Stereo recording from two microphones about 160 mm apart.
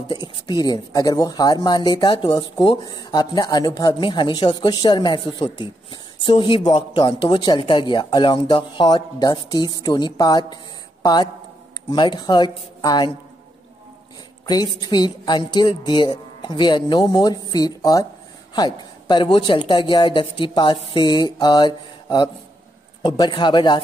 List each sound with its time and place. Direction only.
0.1 s speech: 25° left (ahead or behind)
14.4 s speech: 25° left (ahead or behind)